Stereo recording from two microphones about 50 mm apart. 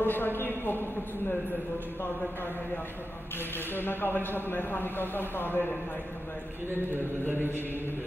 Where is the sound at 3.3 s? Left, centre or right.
Left.